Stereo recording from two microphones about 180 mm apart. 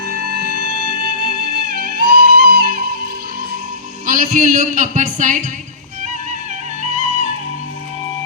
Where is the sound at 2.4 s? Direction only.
55° right (ahead or behind).